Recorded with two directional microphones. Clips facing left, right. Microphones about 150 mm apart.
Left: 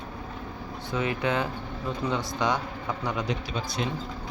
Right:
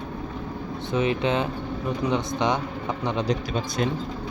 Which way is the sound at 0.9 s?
20° right (ahead or behind).